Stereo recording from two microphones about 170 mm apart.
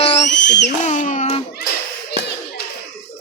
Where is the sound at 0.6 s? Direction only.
45° left (ahead or behind).